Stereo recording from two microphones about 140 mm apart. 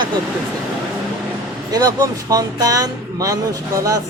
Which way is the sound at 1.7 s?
25° right (ahead or behind).